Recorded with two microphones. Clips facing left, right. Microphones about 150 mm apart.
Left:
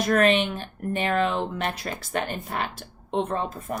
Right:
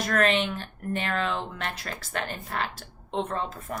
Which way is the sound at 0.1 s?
15° left (ahead or behind).